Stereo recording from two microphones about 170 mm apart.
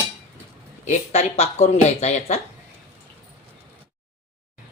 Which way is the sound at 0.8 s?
45° left (ahead or behind).